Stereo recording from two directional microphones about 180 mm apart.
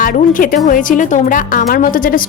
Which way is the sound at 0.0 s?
50° left (ahead or behind).